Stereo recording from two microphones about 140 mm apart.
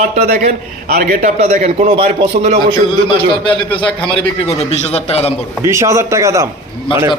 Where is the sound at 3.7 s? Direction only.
10° left (ahead or behind).